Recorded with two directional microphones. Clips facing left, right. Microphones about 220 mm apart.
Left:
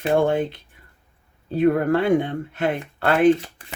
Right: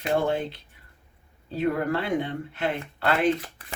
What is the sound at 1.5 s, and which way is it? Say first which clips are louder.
Speech: left 7 dB; 50° left (ahead or behind).